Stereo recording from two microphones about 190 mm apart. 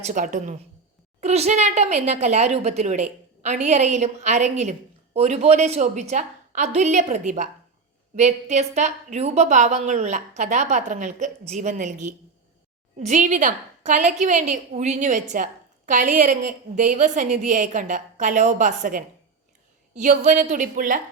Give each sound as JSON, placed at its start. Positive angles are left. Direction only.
{"t": 0.0, "sound": "a woman's voice", "side_deg": -40}